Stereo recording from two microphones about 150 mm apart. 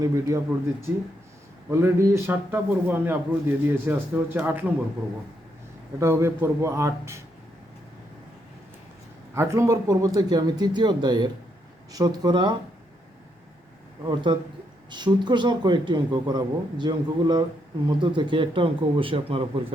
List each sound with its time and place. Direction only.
0.0 s speech: 20° right (ahead or behind)
1.7 s a man's voice: 20° right (ahead or behind)
6.0 s speech: 20° right (ahead or behind)
9.3 s speech: 20° right (ahead or behind)
14.1 s speech: 30° right (ahead or behind)